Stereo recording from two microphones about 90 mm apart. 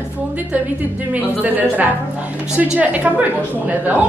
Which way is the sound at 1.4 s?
20° right (ahead or behind).